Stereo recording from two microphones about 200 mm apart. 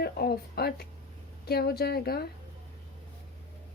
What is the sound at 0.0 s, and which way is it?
A woman's voice, 50° left (ahead or behind).